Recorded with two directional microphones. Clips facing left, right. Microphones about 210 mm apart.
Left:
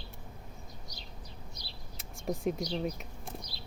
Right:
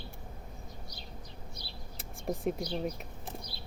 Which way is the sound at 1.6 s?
55° right (ahead or behind).